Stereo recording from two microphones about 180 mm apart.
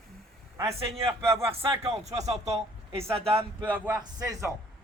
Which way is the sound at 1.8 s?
35° right (ahead or behind).